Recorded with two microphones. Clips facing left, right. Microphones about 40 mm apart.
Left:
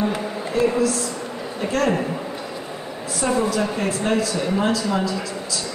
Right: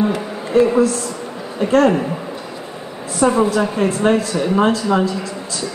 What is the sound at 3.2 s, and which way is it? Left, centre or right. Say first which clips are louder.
Speech: right 6 dB; right.